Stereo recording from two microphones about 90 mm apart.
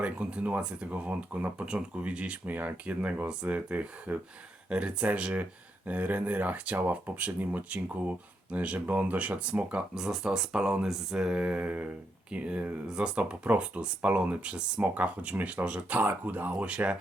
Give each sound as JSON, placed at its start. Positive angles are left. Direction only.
{"t": 0.0, "sound": "speech", "side_deg": -15}